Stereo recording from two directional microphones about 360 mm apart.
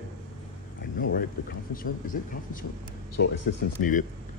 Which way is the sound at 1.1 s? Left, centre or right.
Left.